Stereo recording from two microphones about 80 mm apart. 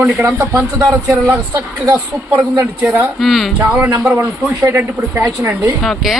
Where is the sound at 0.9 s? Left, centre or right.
Right.